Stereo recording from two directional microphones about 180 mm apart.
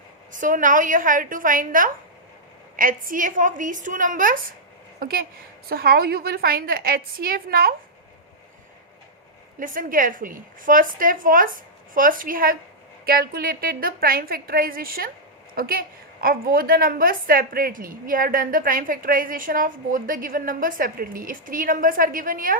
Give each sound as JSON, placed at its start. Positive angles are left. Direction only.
{"t": 0.3, "sound": "a woman's voice", "side_deg": -45}
{"t": 9.6, "sound": "a woman's voice", "side_deg": -50}